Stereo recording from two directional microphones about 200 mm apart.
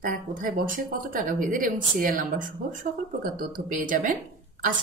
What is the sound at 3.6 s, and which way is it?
A woman's voice, 40° right (ahead or behind).